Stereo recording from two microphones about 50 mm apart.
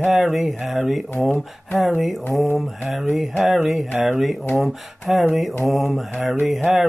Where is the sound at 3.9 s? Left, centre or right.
Centre.